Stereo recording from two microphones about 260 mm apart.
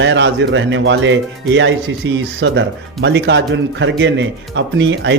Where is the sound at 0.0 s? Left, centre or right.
Right.